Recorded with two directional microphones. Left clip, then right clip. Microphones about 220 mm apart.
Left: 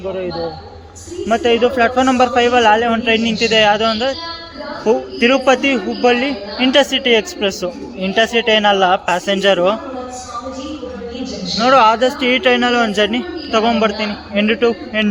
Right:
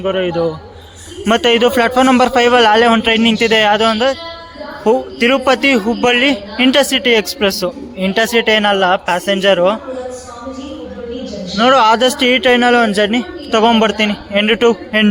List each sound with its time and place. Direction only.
0.0 s a man's voice: 40° right (ahead or behind); by 9.7 s 10° right (ahead or behind)
11.5 s speech: 25° right (ahead or behind)